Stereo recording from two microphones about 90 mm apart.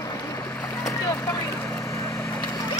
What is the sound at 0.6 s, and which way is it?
Boat, 35° left (ahead or behind).